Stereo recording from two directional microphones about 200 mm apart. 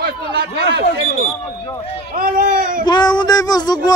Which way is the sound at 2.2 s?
40° right (ahead or behind).